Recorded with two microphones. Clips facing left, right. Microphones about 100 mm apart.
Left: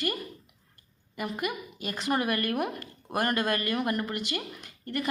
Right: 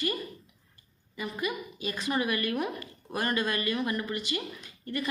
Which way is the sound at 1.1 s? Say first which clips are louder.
Left 1 dB; 60° left (ahead or behind).